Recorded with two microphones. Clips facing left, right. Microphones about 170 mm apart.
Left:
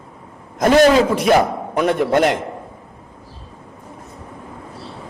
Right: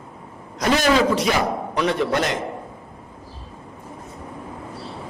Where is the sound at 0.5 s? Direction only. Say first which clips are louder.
Left 6 dB; 50° left (ahead or behind).